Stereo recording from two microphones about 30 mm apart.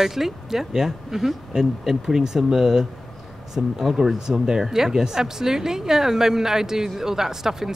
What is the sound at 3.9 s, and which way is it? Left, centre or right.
Speech, centre.